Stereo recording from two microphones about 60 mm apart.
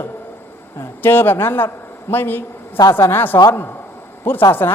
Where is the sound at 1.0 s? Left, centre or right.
Left.